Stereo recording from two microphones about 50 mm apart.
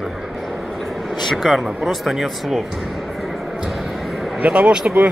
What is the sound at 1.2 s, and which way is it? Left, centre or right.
Speech, centre.